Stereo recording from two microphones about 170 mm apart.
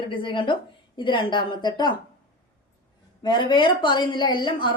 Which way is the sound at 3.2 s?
25° left (ahead or behind).